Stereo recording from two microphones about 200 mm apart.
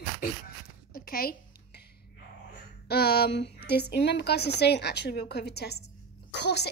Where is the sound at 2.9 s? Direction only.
55° left (ahead or behind).